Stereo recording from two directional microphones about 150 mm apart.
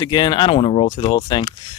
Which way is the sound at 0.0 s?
30° left (ahead or behind).